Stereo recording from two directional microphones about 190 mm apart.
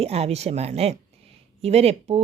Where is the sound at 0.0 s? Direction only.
35° right (ahead or behind).